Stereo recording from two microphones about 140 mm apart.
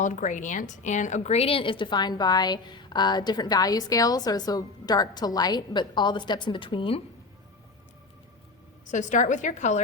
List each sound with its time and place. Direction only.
0.0 s a woman's voice: 65° left (ahead or behind); by 7.0 s 40° left (ahead or behind)
8.9 s a woman's voice: 65° left (ahead or behind)